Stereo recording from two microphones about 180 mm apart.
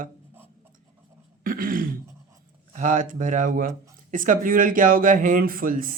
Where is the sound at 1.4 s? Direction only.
50° right (ahead or behind).